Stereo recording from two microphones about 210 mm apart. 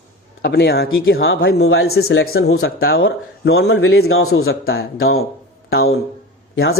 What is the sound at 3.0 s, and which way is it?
Speech, 50° left (ahead or behind).